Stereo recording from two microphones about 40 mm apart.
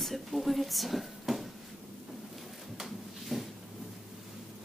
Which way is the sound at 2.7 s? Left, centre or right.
Centre.